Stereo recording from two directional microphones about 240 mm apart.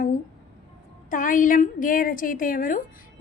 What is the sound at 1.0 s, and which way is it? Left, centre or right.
A woman's voice, left.